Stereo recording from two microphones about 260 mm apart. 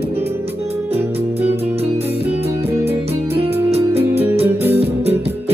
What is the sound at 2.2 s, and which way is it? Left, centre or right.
Music, centre.